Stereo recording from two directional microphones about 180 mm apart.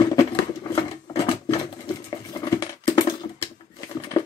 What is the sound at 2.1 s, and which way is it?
Patter, 20° left (ahead or behind).